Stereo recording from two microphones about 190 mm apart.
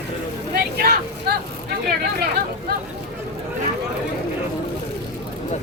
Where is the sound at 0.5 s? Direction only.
55° right (ahead or behind).